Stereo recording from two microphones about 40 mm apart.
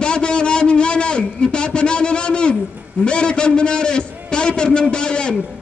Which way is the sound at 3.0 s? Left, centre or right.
Left.